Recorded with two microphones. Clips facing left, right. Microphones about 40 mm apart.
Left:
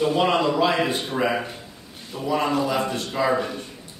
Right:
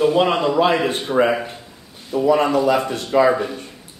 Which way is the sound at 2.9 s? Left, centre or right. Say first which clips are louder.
Right 8 dB; right.